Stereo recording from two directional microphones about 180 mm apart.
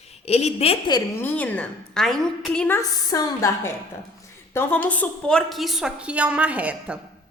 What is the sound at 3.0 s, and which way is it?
A woman's voice, 20° left (ahead or behind).